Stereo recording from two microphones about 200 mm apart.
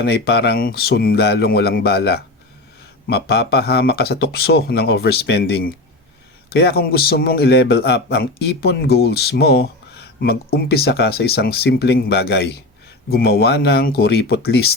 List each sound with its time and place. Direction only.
0.0 s a man's voice: 55° left (ahead or behind)